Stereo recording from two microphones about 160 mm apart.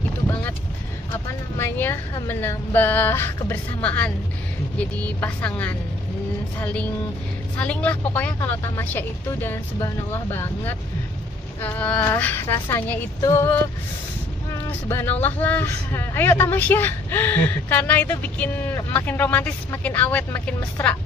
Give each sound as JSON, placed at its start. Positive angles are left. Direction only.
{"t": 1.6, "sound": "a man's voice", "side_deg": 15}
{"t": 14.7, "sound": "a man's voice", "side_deg": 15}